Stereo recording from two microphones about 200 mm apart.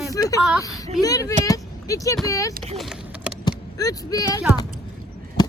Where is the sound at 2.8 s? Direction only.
Centre (ahead or behind).